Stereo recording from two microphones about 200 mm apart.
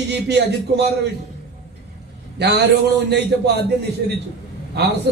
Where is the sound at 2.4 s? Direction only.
55° right (ahead or behind).